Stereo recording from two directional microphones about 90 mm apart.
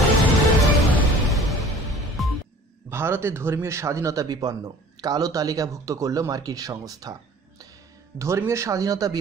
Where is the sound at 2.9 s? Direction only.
25° right (ahead or behind); by 7.1 s 45° right (ahead or behind).